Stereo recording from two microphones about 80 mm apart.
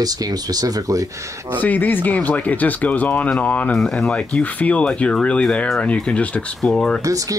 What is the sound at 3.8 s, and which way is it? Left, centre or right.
Speech, centre.